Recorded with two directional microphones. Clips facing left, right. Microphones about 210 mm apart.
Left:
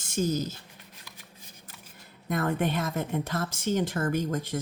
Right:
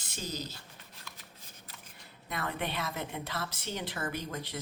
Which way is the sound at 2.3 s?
45° left (ahead or behind).